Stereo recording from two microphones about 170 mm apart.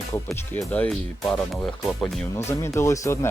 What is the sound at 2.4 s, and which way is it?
Speech, 15° left (ahead or behind).